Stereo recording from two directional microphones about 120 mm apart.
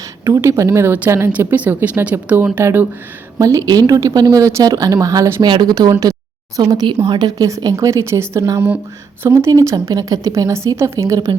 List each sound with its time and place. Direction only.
0.3 s speech: 25° right (ahead or behind)